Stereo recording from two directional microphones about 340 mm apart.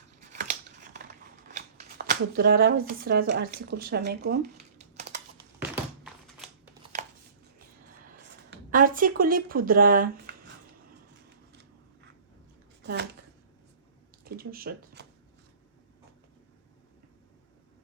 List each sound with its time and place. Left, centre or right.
1.5 s speech: right
4.8 s typing: centre
5.5 s thunk: centre
7.6 s a sound: right
12.8 s a sound: right
14.3 s speech: right